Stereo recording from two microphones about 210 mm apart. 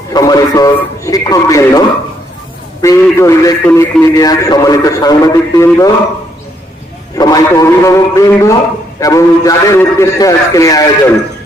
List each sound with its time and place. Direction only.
0.1 s a man's voice: 15° left (ahead or behind)
2.8 s a man's voice: 15° left (ahead or behind)
7.2 s a man's voice: 15° left (ahead or behind)